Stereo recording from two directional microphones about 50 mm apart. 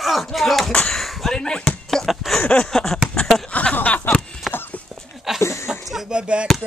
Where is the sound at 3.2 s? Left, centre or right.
Centre.